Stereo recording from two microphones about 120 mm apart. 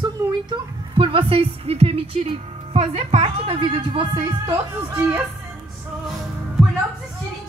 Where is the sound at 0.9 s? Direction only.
45° right (ahead or behind).